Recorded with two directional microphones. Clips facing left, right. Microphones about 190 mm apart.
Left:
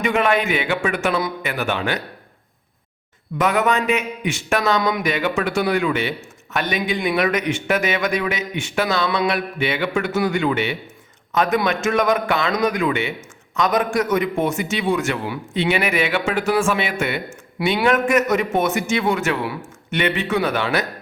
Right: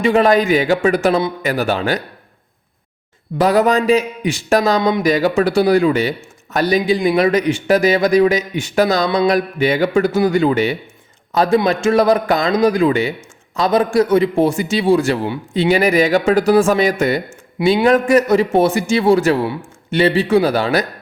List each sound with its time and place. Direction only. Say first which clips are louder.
0.0 s a man's voice: right 6 dB; 35° right (ahead or behind)
3.3 s a man's voice: right 5 dB; 35° right (ahead or behind)